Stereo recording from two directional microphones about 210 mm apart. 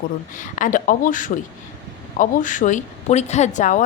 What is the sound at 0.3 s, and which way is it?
A woman's voice, 40° left (ahead or behind).